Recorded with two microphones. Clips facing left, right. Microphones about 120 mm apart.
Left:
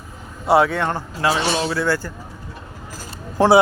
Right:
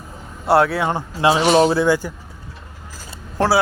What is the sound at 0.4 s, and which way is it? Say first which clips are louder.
Speech: even; centre (ahead or behind).